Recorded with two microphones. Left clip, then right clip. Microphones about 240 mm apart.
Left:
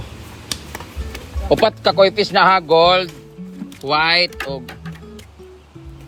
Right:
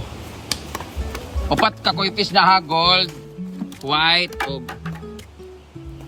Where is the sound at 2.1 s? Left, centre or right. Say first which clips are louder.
Left 2 dB; right.